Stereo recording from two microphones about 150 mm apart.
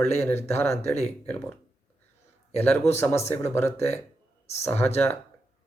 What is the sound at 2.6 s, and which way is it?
Speech, 15° left (ahead or behind).